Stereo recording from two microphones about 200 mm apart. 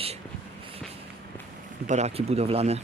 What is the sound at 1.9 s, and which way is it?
Speech, 35° right (ahead or behind).